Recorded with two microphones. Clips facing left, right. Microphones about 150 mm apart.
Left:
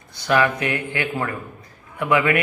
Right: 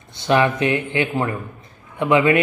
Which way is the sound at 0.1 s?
25° right (ahead or behind).